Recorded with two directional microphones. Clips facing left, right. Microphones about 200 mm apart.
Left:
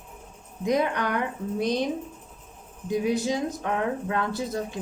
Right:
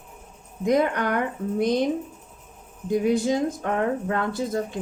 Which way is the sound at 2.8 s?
50° right (ahead or behind).